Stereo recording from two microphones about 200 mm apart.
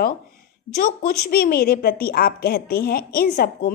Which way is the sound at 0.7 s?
50° left (ahead or behind).